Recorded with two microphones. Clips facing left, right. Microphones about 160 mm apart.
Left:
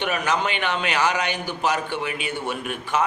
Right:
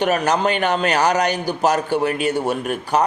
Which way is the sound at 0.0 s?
40° right (ahead or behind).